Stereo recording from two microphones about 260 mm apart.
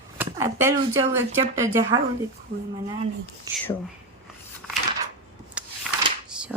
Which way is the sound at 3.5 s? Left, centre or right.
Centre.